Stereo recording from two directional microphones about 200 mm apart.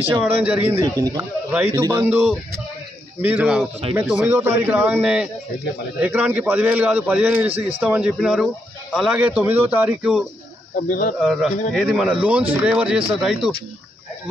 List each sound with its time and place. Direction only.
0.2 s a man's voice: 5° right (ahead or behind)
10.8 s speech: 40° left (ahead or behind)
11.1 s speech: centre (ahead or behind)